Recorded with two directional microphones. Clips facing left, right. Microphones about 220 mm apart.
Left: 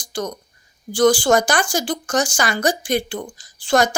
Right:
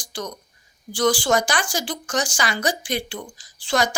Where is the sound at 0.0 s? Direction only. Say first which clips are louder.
Left 6 dB; 45° left (ahead or behind).